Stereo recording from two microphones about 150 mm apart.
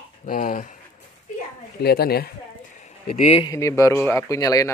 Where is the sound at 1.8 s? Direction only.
90° left.